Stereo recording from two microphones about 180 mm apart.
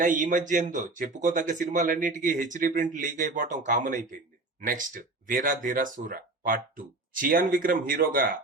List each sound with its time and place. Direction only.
0.0 s speech: 45° right (ahead or behind)